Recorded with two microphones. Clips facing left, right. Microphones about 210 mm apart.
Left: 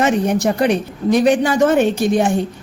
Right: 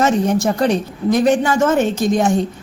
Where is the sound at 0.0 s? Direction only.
15° left (ahead or behind).